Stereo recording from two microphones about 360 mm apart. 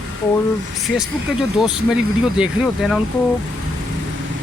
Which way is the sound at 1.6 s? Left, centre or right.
Centre.